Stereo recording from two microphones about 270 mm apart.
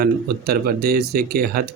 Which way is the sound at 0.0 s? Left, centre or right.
Right.